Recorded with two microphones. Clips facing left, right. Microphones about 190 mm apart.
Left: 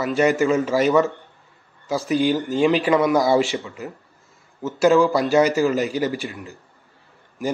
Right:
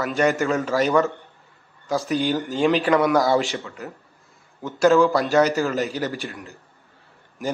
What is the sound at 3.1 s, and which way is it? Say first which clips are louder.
Speech: left 1 dB; 15° left (ahead or behind).